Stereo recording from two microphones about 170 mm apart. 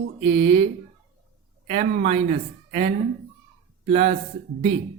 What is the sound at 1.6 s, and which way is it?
Speech, 45° right (ahead or behind).